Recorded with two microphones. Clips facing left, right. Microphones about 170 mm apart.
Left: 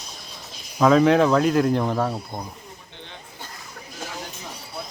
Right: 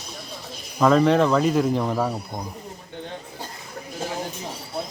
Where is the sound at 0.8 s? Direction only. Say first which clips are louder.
Left 1 dB; centre (ahead or behind).